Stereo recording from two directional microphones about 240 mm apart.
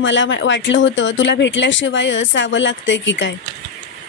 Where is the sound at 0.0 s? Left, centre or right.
Left.